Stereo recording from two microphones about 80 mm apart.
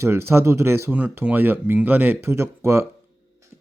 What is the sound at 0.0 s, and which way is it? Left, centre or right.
Speech, right.